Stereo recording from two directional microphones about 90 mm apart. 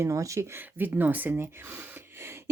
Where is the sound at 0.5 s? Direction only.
20° right (ahead or behind).